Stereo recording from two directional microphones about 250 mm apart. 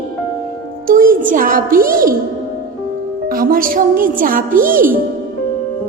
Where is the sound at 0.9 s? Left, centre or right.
Right.